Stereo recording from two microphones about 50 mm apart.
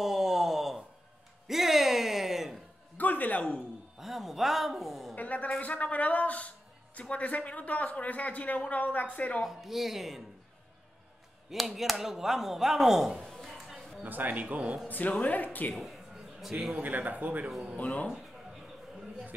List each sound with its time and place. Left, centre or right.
0.0 s a sound: centre
1.5 s music: centre
3.0 s a sound: left
4.0 s a man's voice: centre
5.1 s a man's voice: left
9.5 s speech: centre
11.5 s speech: centre
13.3 s a sound: centre
14.0 s speech: right
14.9 s speech: left
15.7 s a sound: centre
16.8 s speech: right
17.7 s a man's voice: left